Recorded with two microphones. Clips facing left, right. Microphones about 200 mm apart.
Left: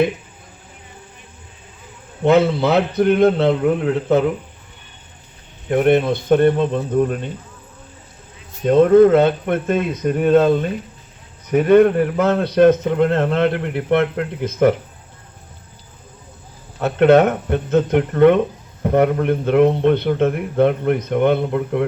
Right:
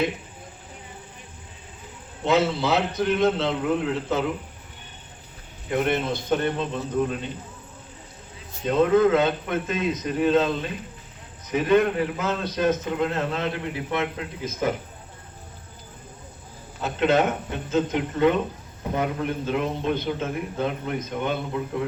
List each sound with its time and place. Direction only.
2.2 s a man's voice: 60° left (ahead or behind)
5.7 s speech: 55° left (ahead or behind)
8.6 s a man's voice: 55° left (ahead or behind)
16.8 s a man's voice: 65° left (ahead or behind)